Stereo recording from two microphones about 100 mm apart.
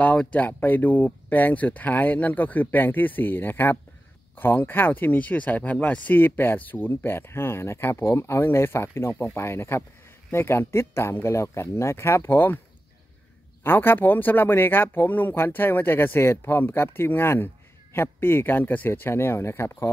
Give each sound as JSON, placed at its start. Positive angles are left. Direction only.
{"t": 0.0, "sound": "speech", "side_deg": 15}
{"t": 13.7, "sound": "speech", "side_deg": 20}